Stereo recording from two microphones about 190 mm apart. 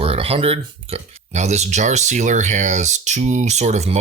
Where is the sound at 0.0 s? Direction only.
30° right (ahead or behind).